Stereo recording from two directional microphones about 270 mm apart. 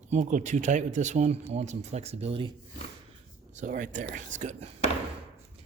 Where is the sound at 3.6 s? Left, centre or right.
Right.